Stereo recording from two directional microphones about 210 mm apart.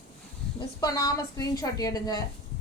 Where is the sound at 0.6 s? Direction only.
15° left (ahead or behind).